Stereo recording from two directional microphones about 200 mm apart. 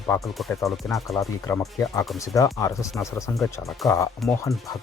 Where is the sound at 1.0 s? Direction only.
15° left (ahead or behind).